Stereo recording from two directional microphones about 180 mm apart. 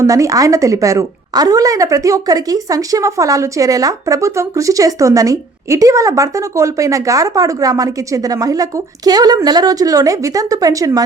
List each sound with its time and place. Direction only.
0.0 s a woman's voice: 15° right (ahead or behind)